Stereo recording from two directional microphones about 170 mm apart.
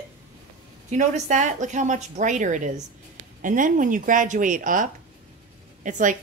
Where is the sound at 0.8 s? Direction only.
40° right (ahead or behind).